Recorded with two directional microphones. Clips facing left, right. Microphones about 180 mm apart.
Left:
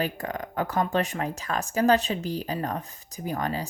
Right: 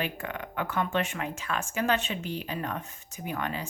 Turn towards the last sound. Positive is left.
turn(degrees=40)  # may be behind; listen again after turning